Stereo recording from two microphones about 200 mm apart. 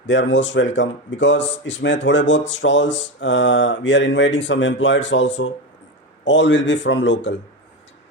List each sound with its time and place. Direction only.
0.1 s a man's voice: 65° left (ahead or behind)